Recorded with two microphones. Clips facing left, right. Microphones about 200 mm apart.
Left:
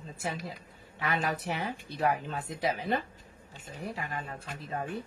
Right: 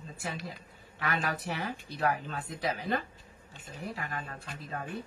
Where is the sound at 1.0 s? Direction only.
20° left (ahead or behind).